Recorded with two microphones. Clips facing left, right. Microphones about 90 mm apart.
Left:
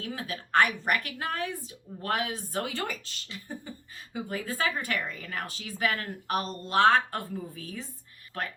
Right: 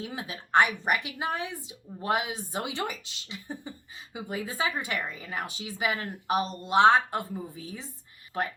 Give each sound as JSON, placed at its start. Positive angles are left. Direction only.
{"t": 0.0, "sound": "a woman's voice", "side_deg": -20}